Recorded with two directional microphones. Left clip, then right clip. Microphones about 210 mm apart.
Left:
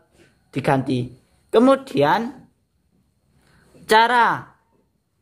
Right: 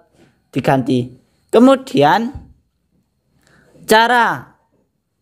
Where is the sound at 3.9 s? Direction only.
25° right (ahead or behind).